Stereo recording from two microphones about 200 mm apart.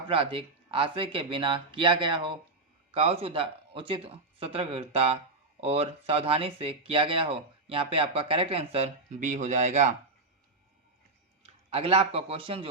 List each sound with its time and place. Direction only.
0.1 s speech: 30° right (ahead or behind)
11.4 s a man's voice: 30° right (ahead or behind)